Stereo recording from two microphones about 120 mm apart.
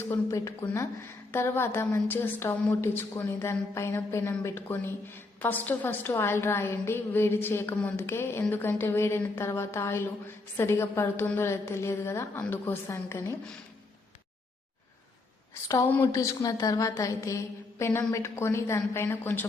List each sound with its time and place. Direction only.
0.0 s a woman's voice: 25° left (ahead or behind)
15.6 s a woman's voice: 25° left (ahead or behind)